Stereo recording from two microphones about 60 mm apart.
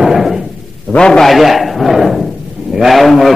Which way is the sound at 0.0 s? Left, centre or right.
Centre.